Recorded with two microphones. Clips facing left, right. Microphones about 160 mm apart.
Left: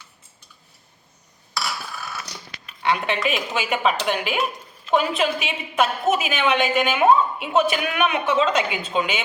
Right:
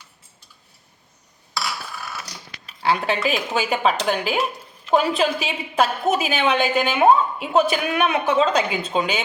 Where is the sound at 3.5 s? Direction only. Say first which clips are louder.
Right 2 dB; 35° right (ahead or behind).